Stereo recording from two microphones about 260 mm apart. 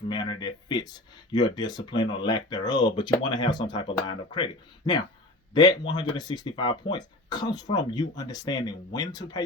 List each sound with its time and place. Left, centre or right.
0.1 s speech: centre